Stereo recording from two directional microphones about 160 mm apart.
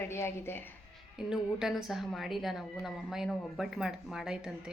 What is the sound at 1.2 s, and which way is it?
A woman's voice, 5° right (ahead or behind).